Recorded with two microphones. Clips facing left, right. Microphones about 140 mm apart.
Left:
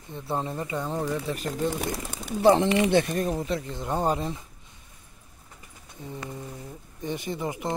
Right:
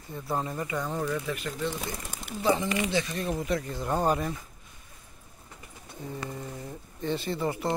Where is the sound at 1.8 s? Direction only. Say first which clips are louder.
Left 5 dB; 65° left (ahead or behind).